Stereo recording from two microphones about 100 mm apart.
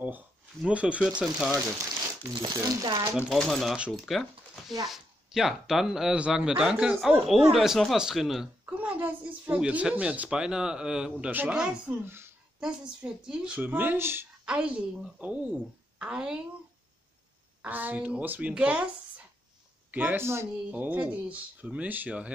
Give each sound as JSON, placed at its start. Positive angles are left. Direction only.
{"t": 0.7, "sound": "speech", "side_deg": -10}
{"t": 2.3, "sound": "speech", "side_deg": -45}
{"t": 3.3, "sound": "speech", "side_deg": 5}
{"t": 3.7, "sound": "speech", "side_deg": -10}
{"t": 4.0, "sound": "a sound", "side_deg": 0}
{"t": 4.8, "sound": "speech", "side_deg": -5}
{"t": 8.6, "sound": "speech", "side_deg": -15}
{"t": 12.0, "sound": "speech", "side_deg": -25}
{"t": 12.5, "sound": "speech", "side_deg": -10}
{"t": 14.4, "sound": "speech", "side_deg": -10}
{"t": 17.6, "sound": "speech", "side_deg": -20}
{"t": 19.9, "sound": "speech", "side_deg": -15}